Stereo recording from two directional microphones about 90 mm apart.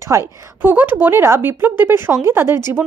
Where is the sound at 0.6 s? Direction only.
20° right (ahead or behind).